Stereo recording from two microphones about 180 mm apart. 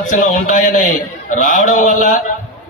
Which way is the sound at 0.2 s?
45° left (ahead or behind).